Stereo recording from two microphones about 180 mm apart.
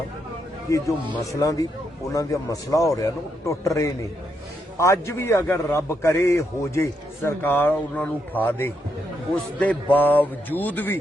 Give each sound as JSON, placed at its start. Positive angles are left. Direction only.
{"t": 1.2, "sound": "a man's voice", "side_deg": 20}
{"t": 4.8, "sound": "a man's voice", "side_deg": 15}